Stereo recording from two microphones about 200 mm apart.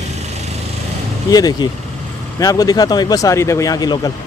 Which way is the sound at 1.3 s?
20° left (ahead or behind).